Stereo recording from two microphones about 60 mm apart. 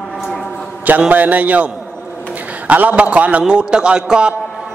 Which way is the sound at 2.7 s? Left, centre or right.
Right.